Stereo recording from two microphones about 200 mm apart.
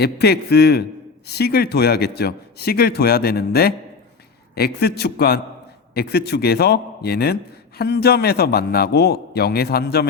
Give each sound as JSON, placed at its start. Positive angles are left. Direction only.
{"t": 0.0, "sound": "a man's voice", "side_deg": 55}